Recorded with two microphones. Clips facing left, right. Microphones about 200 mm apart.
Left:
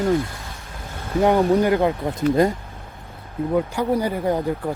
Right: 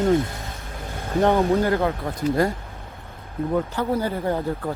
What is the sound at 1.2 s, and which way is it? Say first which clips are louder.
Speech: left 2 dB; 15° left (ahead or behind).